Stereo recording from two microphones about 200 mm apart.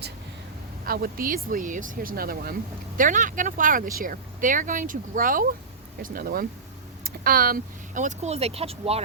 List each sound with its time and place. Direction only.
0.9 s speech: 45° right (ahead or behind); by 9.0 s 30° right (ahead or behind)